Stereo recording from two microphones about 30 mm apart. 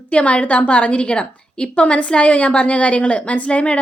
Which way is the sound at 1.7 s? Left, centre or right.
Left.